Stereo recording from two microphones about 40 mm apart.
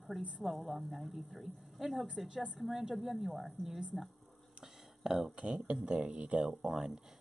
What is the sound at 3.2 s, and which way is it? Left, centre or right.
Speech, centre.